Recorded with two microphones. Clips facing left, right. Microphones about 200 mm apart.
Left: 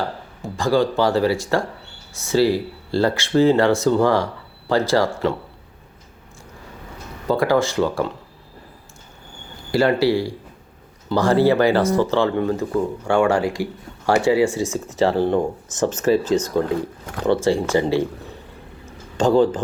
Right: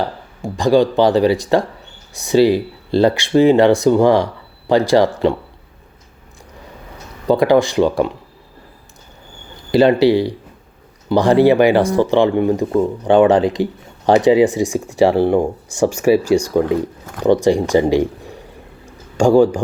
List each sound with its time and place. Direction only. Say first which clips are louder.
0.0 s speech: right 4 dB; 15° right (ahead or behind)
7.3 s speech: right 5 dB; 15° right (ahead or behind)
9.7 s speech: right 6 dB; 20° right (ahead or behind)
18.9 s a sound: right 5 dB; 10° right (ahead or behind)